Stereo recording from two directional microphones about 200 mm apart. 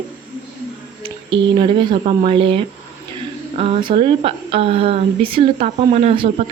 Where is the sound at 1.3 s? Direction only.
25° right (ahead or behind).